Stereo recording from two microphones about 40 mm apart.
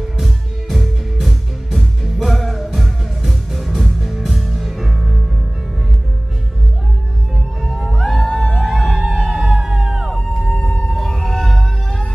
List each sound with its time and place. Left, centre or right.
0.2 s music: centre
7.6 s music: centre
10.4 s whale vocalization: left
10.9 s music: centre